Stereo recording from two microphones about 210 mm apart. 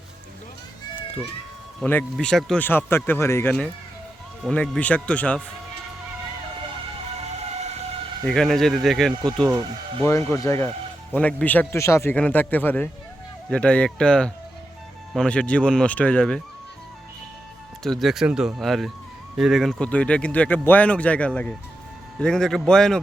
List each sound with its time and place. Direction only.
1.8 s speech: 5° left (ahead or behind)
8.2 s speech: 5° left (ahead or behind)
17.8 s speech: centre (ahead or behind)